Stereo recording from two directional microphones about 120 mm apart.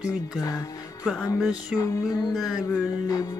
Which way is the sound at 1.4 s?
5° right (ahead or behind).